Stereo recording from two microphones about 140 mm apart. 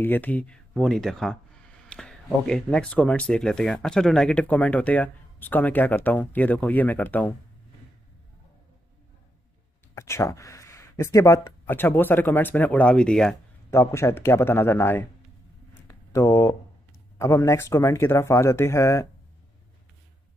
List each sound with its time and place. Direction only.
0.0 s speech: 15° left (ahead or behind)
9.9 s speech: 20° left (ahead or behind)
13.7 s speech: 20° left (ahead or behind)
15.9 s a sound: 20° left (ahead or behind)
17.2 s speech: 20° left (ahead or behind)